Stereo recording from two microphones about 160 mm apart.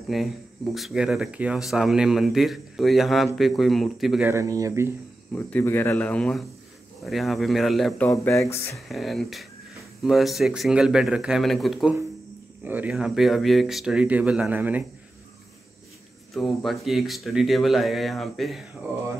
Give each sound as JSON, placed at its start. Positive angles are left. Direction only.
{"t": 0.1, "sound": "speech", "side_deg": 0}
{"t": 4.3, "sound": "speech", "side_deg": -20}
{"t": 5.3, "sound": "speech", "side_deg": 10}
{"t": 16.3, "sound": "speech", "side_deg": 0}